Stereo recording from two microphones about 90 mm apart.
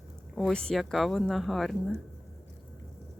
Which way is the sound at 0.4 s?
10° left (ahead or behind).